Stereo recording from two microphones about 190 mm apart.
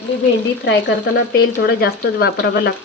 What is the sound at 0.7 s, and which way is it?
Speech, 60° left (ahead or behind).